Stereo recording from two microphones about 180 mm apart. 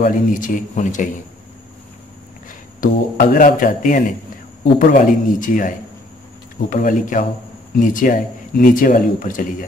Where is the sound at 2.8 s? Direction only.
50° left (ahead or behind).